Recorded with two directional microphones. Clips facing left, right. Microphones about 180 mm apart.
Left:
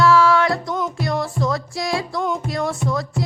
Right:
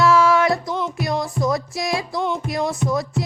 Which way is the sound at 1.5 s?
20° right (ahead or behind).